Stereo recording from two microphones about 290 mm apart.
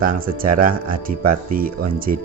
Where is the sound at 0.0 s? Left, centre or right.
Right.